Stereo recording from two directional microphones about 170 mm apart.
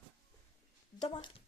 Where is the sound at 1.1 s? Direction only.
25° left (ahead or behind).